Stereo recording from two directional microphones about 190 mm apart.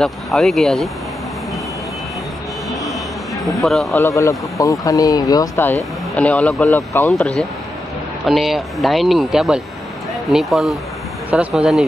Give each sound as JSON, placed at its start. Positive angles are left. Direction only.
{"t": 0.0, "sound": "speech", "side_deg": 0}
{"t": 2.7, "sound": "vehicle", "side_deg": 0}
{"t": 3.4, "sound": "speech", "side_deg": 0}
{"t": 3.9, "sound": "speech", "side_deg": 15}
{"t": 6.1, "sound": "speech", "side_deg": 5}
{"t": 6.7, "sound": "speech", "side_deg": 15}